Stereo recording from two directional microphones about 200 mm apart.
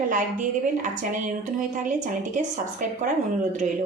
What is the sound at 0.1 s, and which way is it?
A woman's voice, 40° right (ahead or behind).